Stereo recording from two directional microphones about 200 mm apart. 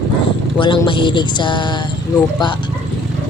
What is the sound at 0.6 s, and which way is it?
Speech, 25° left (ahead or behind).